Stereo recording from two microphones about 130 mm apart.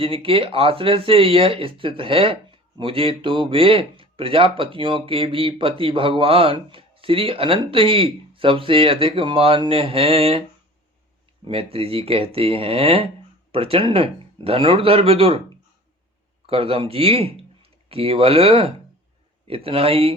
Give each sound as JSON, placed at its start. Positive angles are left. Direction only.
{"t": 0.0, "sound": "speech", "side_deg": -45}
{"t": 11.4, "sound": "speech", "side_deg": -45}
{"t": 16.5, "sound": "speech", "side_deg": -50}